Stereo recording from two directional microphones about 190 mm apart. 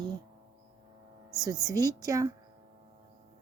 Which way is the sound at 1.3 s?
20° right (ahead or behind).